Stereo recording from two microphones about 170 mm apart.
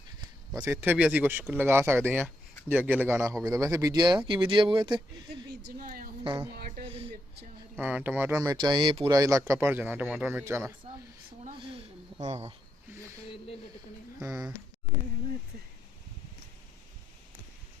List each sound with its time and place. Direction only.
0.6 s speech: 10° right (ahead or behind); by 5.5 s 30° right (ahead or behind)
5.7 s a woman's voice: 55° right (ahead or behind)
7.8 s speech: 10° right (ahead or behind)
8.5 s speech: 25° right (ahead or behind)
11.5 s a sound: 30° right (ahead or behind)
14.2 s speech: 15° right (ahead or behind)